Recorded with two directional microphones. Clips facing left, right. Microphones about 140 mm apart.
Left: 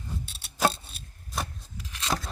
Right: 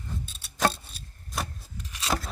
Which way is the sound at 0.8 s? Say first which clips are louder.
Even; 25° left (ahead or behind).